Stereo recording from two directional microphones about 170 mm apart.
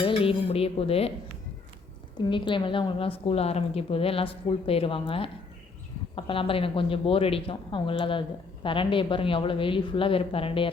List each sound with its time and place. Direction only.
0.0 s a woman's voice: 35° left (ahead or behind)
2.3 s a woman's voice: 30° left (ahead or behind)